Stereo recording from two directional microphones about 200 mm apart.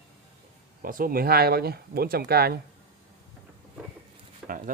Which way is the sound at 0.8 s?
45° right (ahead or behind).